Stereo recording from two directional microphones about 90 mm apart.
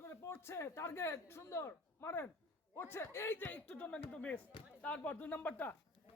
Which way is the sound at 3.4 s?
15° left (ahead or behind).